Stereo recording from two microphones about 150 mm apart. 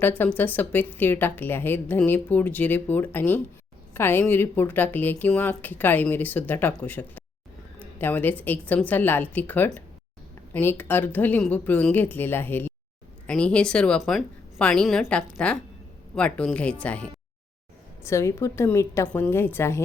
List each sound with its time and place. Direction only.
0.0 s a woman's voice: 10° left (ahead or behind)
18.0 s a woman's voice: 20° left (ahead or behind)